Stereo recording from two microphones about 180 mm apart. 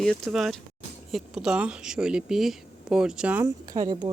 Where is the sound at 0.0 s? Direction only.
Centre (ahead or behind).